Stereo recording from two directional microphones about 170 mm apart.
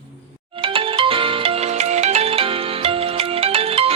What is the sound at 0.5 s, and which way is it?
Music, 30° right (ahead or behind).